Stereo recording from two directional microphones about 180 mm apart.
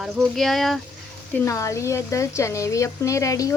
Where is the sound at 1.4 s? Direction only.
15° left (ahead or behind).